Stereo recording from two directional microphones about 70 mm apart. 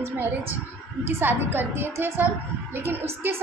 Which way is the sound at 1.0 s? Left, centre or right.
Right.